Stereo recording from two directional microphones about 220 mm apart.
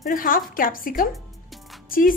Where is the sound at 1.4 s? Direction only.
Centre (ahead or behind).